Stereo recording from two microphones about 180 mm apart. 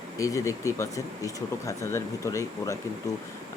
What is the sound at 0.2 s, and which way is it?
Speech, 15° left (ahead or behind).